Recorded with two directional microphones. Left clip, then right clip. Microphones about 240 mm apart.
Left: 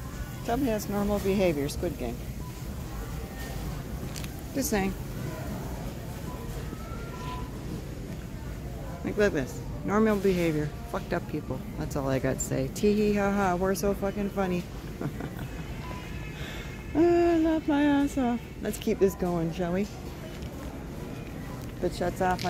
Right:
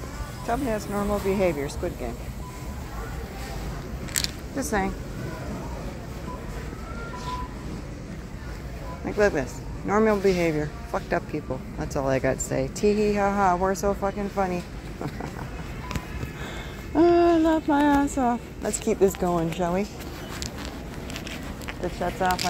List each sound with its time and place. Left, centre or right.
0.5 s speech: centre
4.6 s speech: left
9.0 s speech: centre
16.9 s female singing: centre
19.2 s speech: centre
21.9 s speech: left